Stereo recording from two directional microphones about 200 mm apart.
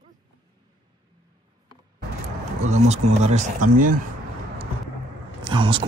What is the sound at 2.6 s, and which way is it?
Speech, 35° right (ahead or behind).